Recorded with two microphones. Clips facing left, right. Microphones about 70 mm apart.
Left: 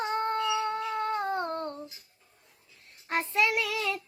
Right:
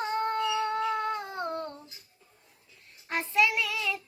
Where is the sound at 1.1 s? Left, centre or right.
Left.